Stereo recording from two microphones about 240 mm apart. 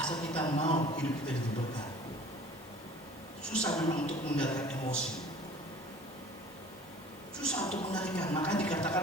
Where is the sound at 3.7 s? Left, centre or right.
Centre.